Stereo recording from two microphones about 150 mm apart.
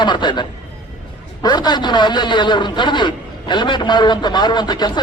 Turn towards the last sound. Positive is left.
turn(degrees=30)  # may be behind; listen again after turning